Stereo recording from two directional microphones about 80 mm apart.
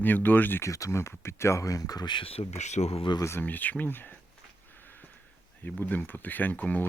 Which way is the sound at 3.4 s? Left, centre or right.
Left.